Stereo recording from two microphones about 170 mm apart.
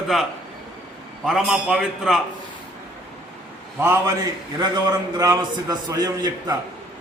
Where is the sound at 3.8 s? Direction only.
15° right (ahead or behind).